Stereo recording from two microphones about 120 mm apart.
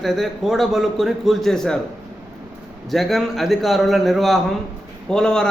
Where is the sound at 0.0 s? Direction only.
Centre (ahead or behind).